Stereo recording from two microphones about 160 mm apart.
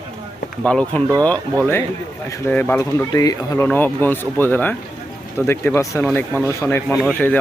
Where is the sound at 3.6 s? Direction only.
10° left (ahead or behind).